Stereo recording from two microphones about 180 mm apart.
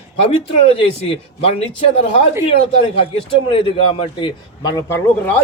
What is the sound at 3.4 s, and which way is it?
A man's voice, 30° left (ahead or behind).